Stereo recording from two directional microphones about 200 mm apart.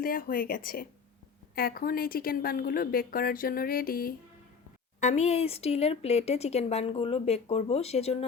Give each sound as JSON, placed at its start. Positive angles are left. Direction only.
{"t": 0.0, "sound": "a woman's voice", "side_deg": 45}
{"t": 4.9, "sound": "speech", "side_deg": 35}